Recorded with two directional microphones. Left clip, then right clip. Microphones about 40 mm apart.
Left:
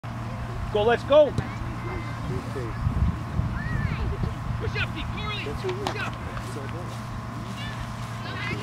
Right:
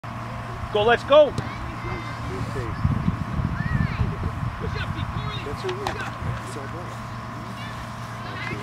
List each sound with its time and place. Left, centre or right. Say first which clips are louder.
0.7 s speech: right 3 dB; right